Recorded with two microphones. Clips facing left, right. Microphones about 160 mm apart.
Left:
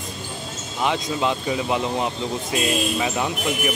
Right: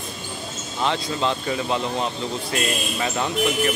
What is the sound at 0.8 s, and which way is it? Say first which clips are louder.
Speech: left 1 dB; 15° left (ahead or behind).